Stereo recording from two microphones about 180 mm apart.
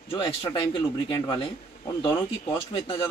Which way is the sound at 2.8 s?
30° left (ahead or behind).